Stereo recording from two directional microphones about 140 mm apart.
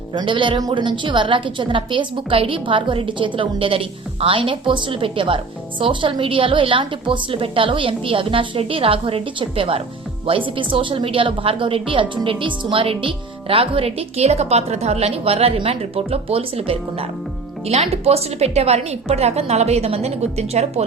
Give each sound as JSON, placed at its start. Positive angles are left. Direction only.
{"t": 0.1, "sound": "a woman's voice", "side_deg": -35}